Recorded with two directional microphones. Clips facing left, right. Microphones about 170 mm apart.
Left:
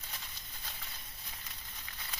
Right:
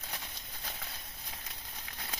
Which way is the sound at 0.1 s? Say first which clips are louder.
Right 3 dB; 65° right (ahead or behind).